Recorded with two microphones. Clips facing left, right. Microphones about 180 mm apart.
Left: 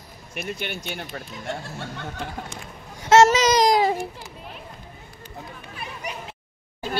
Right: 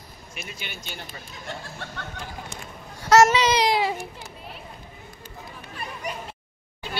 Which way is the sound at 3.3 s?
45° left (ahead or behind).